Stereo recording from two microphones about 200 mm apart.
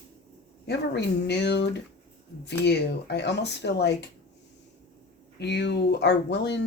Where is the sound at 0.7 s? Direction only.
60° left (ahead or behind).